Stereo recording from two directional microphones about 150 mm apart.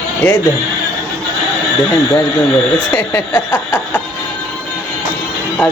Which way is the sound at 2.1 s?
15° left (ahead or behind).